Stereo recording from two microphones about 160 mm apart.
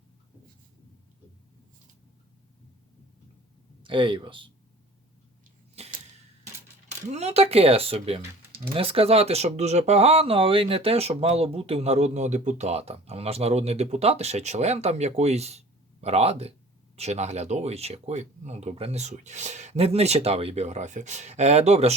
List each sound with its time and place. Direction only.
3.8 s speech: 30° right (ahead or behind)
5.8 s arrow: 40° right (ahead or behind)
6.8 s speech: 45° right (ahead or behind)